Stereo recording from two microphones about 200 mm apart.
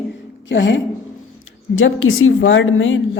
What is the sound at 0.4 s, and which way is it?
Speech, 65° left (ahead or behind).